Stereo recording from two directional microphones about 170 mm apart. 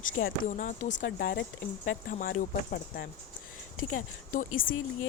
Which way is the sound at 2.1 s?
55° left (ahead or behind).